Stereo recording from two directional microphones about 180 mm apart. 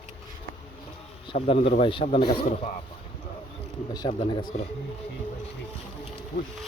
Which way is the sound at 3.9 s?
25° left (ahead or behind).